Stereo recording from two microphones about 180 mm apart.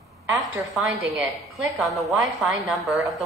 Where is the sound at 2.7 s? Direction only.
Centre (ahead or behind).